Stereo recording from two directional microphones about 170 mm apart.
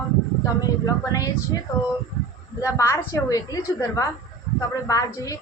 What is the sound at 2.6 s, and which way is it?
A woman's voice, 20° left (ahead or behind).